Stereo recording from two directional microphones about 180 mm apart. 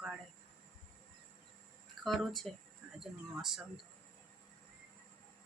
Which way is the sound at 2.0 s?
Centre (ahead or behind).